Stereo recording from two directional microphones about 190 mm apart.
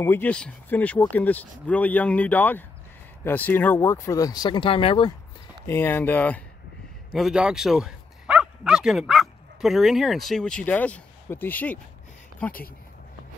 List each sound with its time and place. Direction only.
0.0 s speech: 10° left (ahead or behind); by 5.1 s 25° left (ahead or behind)
5.7 s speech: 10° left (ahead or behind)
7.2 s speech: 5° right (ahead or behind)